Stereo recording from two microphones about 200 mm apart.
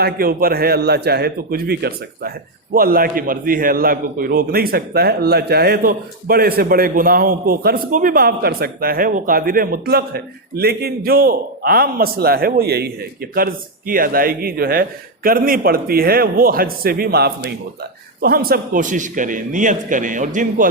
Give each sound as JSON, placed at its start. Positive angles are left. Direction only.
{"t": 0.0, "sound": "a man's voice", "side_deg": -50}